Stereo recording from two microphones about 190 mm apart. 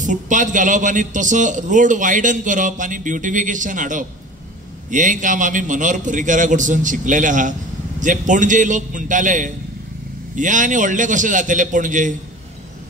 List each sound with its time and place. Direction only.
0.0 s a man's voice: 40° right (ahead or behind)